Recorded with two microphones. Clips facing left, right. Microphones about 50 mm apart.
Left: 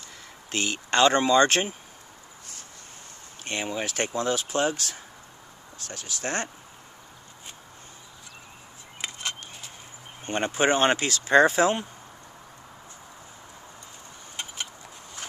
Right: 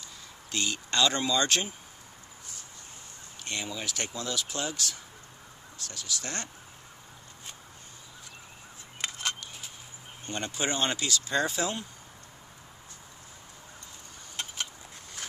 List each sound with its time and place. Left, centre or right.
0.5 s speech: left
3.4 s speech: left
9.0 s a sound: centre
10.2 s speech: left
14.3 s vehicle: centre